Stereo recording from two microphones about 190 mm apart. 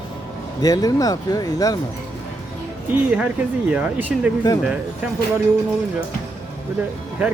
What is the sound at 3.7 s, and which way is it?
Speech, 5° right (ahead or behind).